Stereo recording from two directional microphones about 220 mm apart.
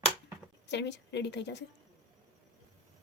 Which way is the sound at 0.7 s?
50° left (ahead or behind).